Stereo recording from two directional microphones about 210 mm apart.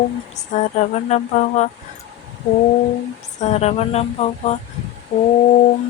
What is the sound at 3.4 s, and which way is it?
Speech, 30° left (ahead or behind).